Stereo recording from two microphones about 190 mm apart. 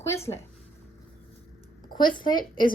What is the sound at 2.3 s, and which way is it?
Speech, 45° left (ahead or behind).